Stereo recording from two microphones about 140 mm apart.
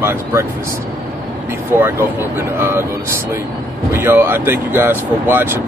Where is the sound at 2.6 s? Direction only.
15° right (ahead or behind).